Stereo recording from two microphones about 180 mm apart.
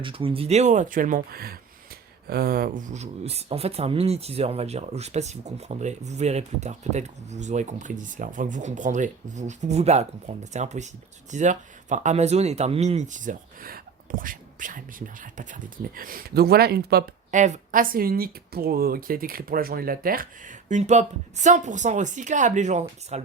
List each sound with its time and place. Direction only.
0.0 s a woman's voice: 30° right (ahead or behind); by 17.0 s 60° right (ahead or behind)
17.3 s a woman's voice: 40° right (ahead or behind)